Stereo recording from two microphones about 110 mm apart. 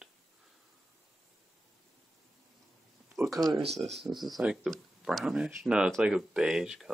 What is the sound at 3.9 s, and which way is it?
Speech, centre (ahead or behind).